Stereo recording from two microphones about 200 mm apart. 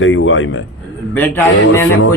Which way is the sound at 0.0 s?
70° left (ahead or behind).